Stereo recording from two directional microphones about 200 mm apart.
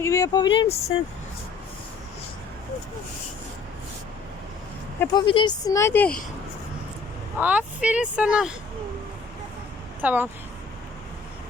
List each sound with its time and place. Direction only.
0.0 s speech: 15° left (ahead or behind)
5.1 s speech: 25° left (ahead or behind); by 6.1 s 10° left (ahead or behind)
7.3 s speech: 5° right (ahead or behind)
10.0 s speech: 10° right (ahead or behind)